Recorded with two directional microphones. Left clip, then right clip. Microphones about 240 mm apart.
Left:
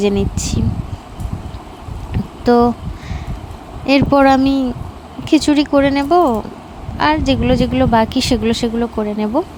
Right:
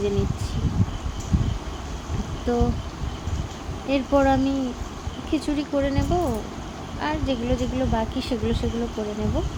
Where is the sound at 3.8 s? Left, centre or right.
Left.